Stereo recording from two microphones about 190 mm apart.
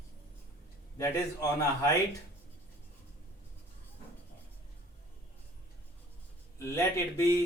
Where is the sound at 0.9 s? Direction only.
20° left (ahead or behind).